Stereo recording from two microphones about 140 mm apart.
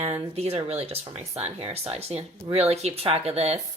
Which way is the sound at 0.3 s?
50° right (ahead or behind).